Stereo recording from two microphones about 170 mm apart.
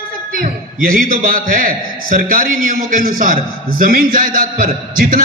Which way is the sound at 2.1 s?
55° right (ahead or behind).